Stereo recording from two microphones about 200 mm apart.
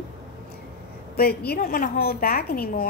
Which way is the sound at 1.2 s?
50° left (ahead or behind).